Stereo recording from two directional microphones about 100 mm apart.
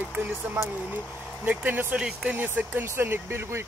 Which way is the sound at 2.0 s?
5° right (ahead or behind).